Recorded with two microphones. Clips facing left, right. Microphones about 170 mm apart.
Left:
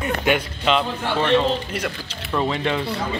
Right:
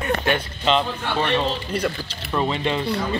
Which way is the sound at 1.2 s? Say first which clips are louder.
Left 4 dB; 10° right (ahead or behind).